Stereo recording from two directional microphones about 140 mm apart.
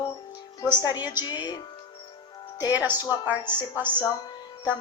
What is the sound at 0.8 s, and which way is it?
Speech, 30° left (ahead or behind).